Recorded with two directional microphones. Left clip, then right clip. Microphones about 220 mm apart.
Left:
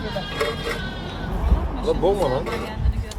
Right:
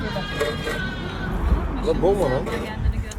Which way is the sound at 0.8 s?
50° left (ahead or behind).